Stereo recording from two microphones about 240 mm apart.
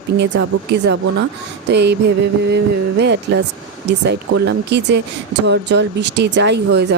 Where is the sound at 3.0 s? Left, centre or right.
Right.